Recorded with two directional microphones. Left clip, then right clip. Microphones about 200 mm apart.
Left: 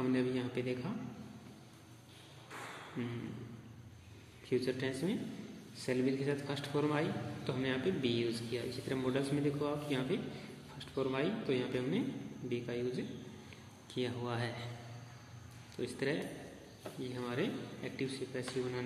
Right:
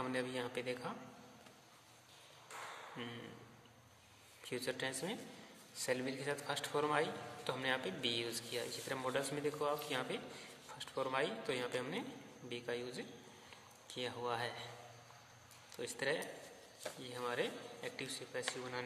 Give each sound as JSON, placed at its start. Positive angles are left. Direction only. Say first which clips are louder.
{"t": 0.0, "sound": "a man's voice", "louder": "left 5 dB", "side_deg": -30}
{"t": 4.5, "sound": "a man's voice", "louder": "left 5 dB", "side_deg": -30}
{"t": 15.7, "sound": "a man's voice", "louder": "left 2 dB", "side_deg": -25}